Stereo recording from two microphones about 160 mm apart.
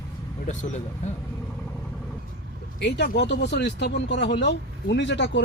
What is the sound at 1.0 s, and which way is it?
Speech, 50° left (ahead or behind).